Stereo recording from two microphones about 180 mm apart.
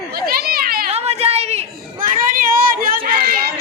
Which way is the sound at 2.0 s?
45° right (ahead or behind).